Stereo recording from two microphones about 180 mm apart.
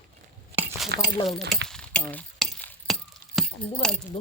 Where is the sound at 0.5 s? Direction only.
35° right (ahead or behind).